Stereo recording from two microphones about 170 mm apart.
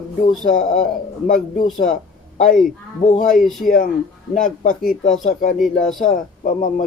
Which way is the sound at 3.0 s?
45° left (ahead or behind).